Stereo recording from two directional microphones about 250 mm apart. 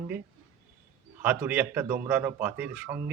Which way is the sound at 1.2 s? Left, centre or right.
Centre.